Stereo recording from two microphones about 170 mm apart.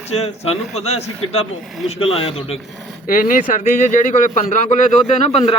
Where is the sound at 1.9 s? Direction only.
35° left (ahead or behind).